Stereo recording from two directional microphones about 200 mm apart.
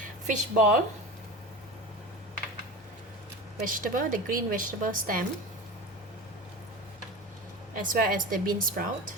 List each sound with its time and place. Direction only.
0.3 s speech: 40° right (ahead or behind)
3.6 s speech: 40° right (ahead or behind)
7.8 s speech: 45° right (ahead or behind)